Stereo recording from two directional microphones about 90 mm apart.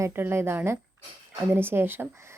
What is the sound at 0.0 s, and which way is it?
A woman's voice, 25° right (ahead or behind).